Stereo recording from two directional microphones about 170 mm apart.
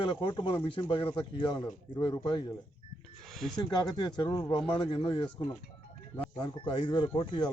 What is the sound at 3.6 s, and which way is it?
A man's voice, 25° left (ahead or behind).